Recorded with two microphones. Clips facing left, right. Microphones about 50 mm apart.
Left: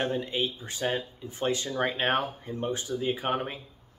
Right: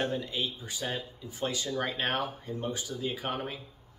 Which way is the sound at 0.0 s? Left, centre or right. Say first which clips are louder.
Left 3 dB; left.